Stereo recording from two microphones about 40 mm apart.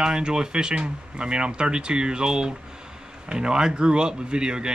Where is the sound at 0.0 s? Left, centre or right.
Right.